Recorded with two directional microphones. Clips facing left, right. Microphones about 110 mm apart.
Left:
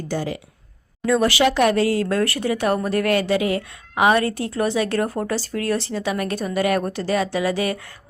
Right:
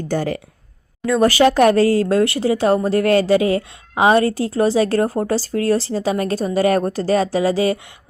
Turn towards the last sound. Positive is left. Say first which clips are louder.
# right 5 dB
turn(degrees=-30)  # may be behind; listen again after turning